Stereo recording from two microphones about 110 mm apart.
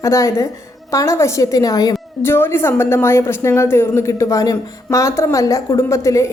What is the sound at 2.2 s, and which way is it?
A woman's voice, 20° left (ahead or behind).